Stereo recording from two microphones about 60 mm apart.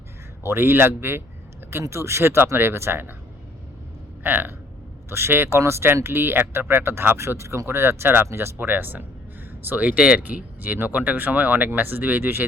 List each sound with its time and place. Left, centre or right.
0.4 s speech: right
1.8 s speech: right
4.2 s speech: right
5.0 s speech: right